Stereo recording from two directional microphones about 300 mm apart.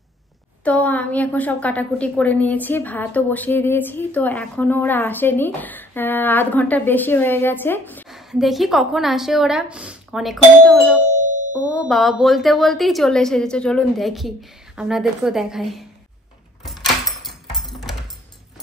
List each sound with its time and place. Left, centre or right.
0.7 s a woman's voice: centre
11.1 s music: right
11.8 s a woman's voice: centre
16.6 s music: centre